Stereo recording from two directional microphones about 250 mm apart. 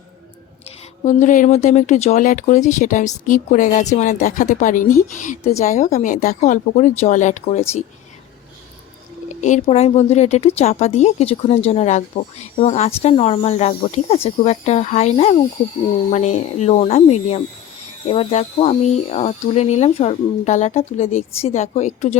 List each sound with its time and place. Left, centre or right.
1.0 s speech: left
9.3 s speech: left